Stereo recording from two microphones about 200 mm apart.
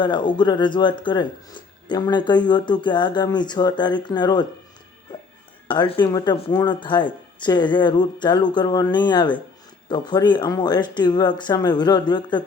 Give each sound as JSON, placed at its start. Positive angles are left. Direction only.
{"t": 0.0, "sound": "speech", "side_deg": 20}
{"t": 5.6, "sound": "speech", "side_deg": 25}